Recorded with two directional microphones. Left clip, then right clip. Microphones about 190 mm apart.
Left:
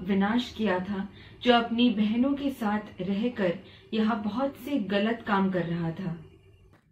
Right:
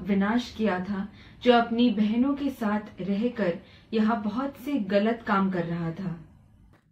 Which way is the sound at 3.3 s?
5° right (ahead or behind).